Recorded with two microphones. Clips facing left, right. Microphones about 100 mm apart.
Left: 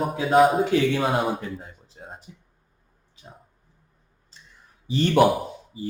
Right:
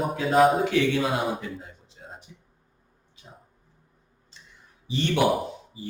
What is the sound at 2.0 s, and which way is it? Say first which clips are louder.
Music: left 4 dB; 40° left (ahead or behind).